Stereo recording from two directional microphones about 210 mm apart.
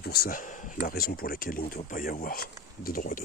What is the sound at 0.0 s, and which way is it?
Speech, 45° left (ahead or behind).